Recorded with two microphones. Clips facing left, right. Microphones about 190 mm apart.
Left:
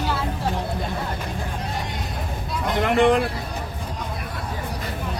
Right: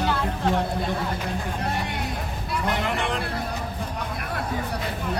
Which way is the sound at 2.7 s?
60° left (ahead or behind).